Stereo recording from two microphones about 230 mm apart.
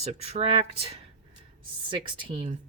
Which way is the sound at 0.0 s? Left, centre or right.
Right.